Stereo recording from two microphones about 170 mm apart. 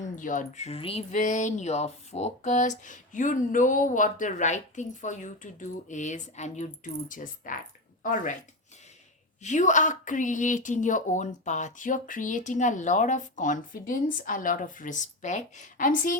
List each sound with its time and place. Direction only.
0.0 s speech: 50° left (ahead or behind)
9.4 s speech: 45° left (ahead or behind)